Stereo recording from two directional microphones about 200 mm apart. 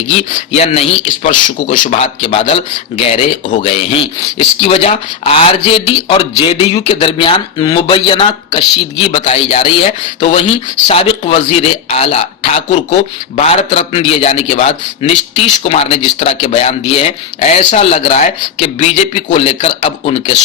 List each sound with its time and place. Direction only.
0.1 s speech: 30° left (ahead or behind)
1.8 s speech: 30° left (ahead or behind)
19.3 s speech: 30° left (ahead or behind)